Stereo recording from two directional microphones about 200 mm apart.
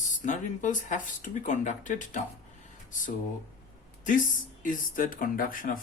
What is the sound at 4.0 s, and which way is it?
Speech, 40° left (ahead or behind).